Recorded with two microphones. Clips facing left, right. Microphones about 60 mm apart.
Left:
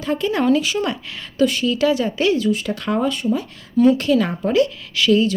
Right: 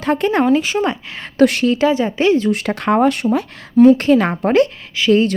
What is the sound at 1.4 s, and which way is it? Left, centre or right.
Speech, right.